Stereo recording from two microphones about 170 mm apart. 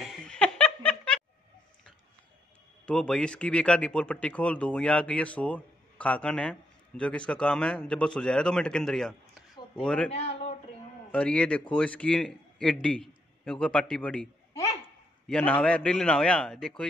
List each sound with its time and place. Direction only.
0.0 s laughter: centre (ahead or behind)
2.9 s a man's voice: 5° left (ahead or behind)
10.1 s a sound: 40° left (ahead or behind)
11.1 s a man's voice: 5° left (ahead or behind)